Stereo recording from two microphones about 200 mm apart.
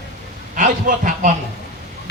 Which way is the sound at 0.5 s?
40° right (ahead or behind).